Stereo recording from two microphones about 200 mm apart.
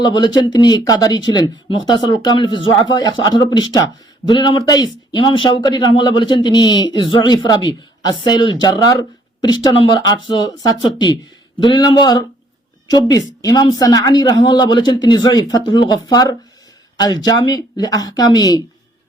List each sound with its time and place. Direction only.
0.0 s speech: 20° left (ahead or behind)
13.4 s speech: 20° left (ahead or behind)